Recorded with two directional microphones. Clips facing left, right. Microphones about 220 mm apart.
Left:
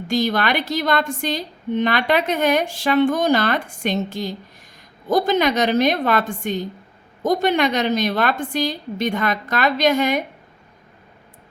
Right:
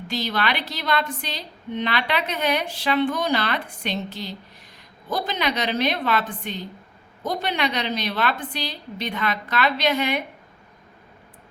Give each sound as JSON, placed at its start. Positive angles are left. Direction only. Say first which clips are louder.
{"t": 0.1, "sound": "a woman's voice", "louder": "left 6 dB", "side_deg": 45}